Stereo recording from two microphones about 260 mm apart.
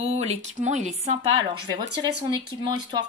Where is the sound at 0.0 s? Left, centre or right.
Right.